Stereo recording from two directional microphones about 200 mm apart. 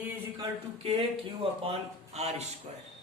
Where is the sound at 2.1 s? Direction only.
35° right (ahead or behind).